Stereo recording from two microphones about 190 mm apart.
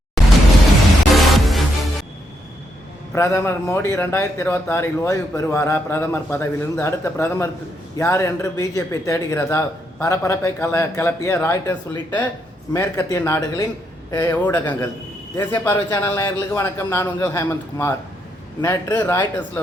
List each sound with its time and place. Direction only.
1.1 s music: centre (ahead or behind)
3.2 s speech: 15° left (ahead or behind)